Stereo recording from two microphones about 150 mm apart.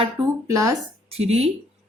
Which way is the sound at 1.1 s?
45° right (ahead or behind).